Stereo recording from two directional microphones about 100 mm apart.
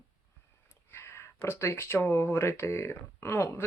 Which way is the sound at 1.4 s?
25° left (ahead or behind).